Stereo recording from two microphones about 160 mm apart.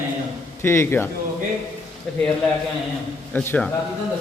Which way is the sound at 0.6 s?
15° left (ahead or behind).